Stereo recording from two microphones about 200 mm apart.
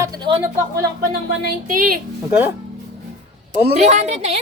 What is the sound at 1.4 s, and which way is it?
Speech, 45° right (ahead or behind).